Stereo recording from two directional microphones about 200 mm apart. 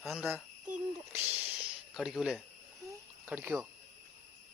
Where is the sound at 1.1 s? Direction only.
10° right (ahead or behind).